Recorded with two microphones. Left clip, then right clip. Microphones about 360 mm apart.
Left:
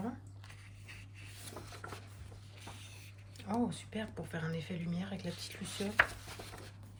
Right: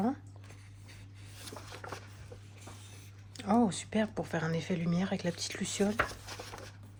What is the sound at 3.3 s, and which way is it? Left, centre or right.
Speech, centre.